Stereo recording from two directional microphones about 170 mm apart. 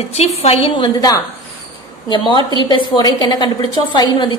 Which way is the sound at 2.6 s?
25° left (ahead or behind).